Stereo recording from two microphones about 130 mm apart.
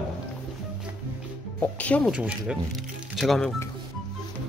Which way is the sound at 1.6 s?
10° left (ahead or behind).